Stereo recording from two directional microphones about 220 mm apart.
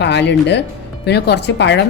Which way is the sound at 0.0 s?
50° left (ahead or behind).